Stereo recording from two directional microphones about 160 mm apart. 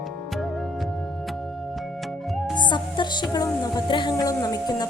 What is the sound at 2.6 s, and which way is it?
Music, 30° left (ahead or behind).